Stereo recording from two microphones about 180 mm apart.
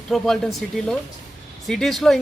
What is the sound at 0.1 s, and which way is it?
Speech, centre (ahead or behind).